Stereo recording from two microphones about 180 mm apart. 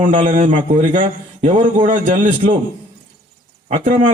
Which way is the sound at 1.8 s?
45° right (ahead or behind).